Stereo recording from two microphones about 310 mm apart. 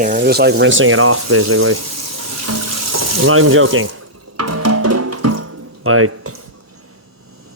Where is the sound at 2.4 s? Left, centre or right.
Right.